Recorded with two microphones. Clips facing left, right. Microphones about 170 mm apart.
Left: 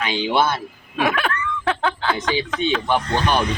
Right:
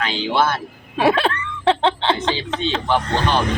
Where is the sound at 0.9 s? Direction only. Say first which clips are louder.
Right 4 dB; 30° right (ahead or behind).